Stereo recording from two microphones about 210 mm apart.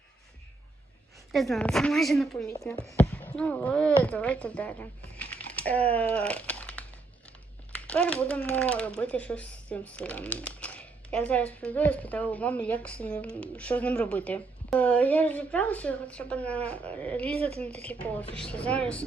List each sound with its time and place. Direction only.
1.3 s a woman's voice: centre (ahead or behind)
2.6 s speech: 10° left (ahead or behind)
7.9 s speech: 5° left (ahead or behind)
17.3 s a woman's voice: 30° right (ahead or behind)
17.8 s speech: 5° left (ahead or behind)